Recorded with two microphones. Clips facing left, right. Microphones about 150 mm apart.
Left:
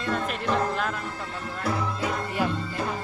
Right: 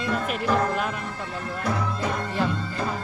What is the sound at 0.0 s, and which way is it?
Speech, 5° right (ahead or behind).